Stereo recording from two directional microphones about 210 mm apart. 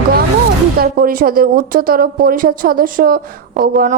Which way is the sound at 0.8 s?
45° right (ahead or behind).